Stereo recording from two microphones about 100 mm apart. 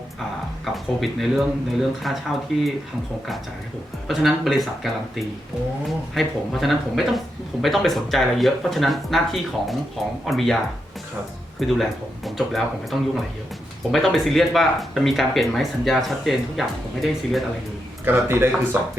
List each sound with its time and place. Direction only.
0.6 s speech: centre (ahead or behind)
4.1 s speech: centre (ahead or behind)
11.6 s speech: centre (ahead or behind)
18.0 s speech: 20° right (ahead or behind)